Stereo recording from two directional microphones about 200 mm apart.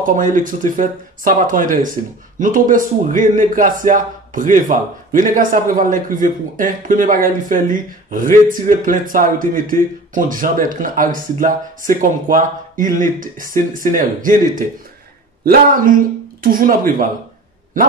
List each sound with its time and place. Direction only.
0.0 s a man's voice: 40° right (ahead or behind)